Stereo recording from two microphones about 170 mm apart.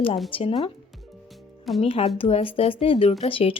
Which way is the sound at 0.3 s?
30° left (ahead or behind).